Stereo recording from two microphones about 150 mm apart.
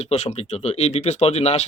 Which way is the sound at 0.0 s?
45° left (ahead or behind).